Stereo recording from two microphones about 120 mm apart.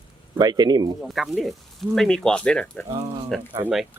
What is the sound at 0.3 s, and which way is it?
Speech, 35° right (ahead or behind).